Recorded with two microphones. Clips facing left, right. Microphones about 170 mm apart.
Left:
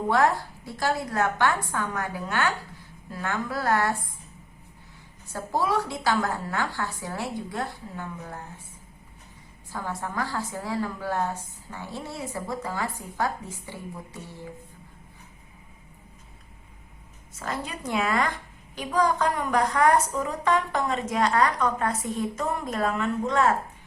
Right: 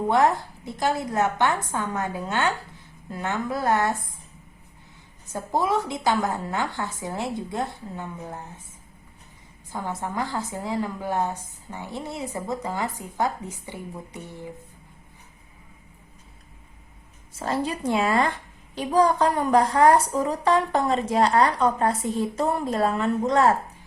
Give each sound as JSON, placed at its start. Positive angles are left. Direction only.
{"t": 0.1, "sound": "a woman's voice", "side_deg": -20}
{"t": 5.3, "sound": "a woman's voice", "side_deg": -20}
{"t": 9.7, "sound": "a woman's voice", "side_deg": -20}
{"t": 17.3, "sound": "a woman's voice", "side_deg": -30}